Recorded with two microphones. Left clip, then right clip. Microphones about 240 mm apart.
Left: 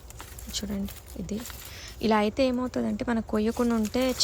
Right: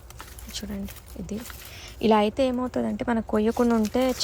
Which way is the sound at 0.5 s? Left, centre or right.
Centre.